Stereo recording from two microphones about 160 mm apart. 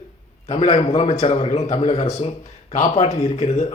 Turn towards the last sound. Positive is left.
turn(degrees=45)  # may be behind; listen again after turning